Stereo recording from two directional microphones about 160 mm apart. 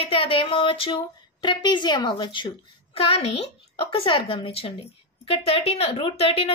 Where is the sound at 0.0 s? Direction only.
35° left (ahead or behind).